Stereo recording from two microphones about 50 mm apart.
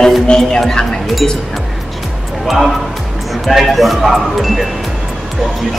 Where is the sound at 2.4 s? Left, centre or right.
Centre.